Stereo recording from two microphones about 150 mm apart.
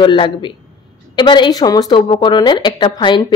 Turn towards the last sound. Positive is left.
turn(degrees=30)  # may be behind; listen again after turning